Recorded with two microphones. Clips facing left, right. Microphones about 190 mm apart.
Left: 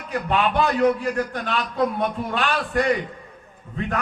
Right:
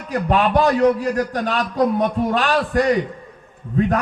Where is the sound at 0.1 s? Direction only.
40° right (ahead or behind).